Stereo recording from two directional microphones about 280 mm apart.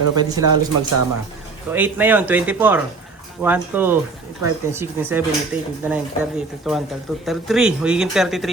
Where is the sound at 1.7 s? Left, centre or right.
Centre.